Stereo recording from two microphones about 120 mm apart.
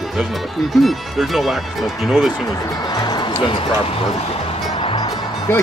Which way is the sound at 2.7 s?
35° left (ahead or behind).